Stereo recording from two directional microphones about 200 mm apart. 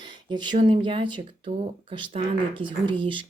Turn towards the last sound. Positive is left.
turn(degrees=-25)  # may be behind; listen again after turning